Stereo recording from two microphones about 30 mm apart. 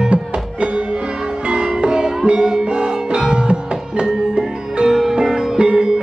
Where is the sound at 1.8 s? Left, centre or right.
Right.